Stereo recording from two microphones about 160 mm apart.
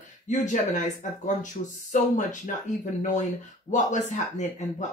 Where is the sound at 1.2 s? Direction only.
50° left (ahead or behind).